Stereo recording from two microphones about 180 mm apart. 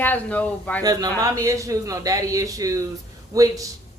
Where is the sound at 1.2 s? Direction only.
15° right (ahead or behind).